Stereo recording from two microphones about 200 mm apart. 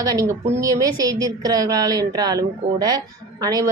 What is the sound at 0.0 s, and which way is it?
A woman's voice, 15° right (ahead or behind).